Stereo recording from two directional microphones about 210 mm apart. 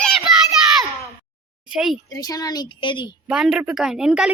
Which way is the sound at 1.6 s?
Centre (ahead or behind).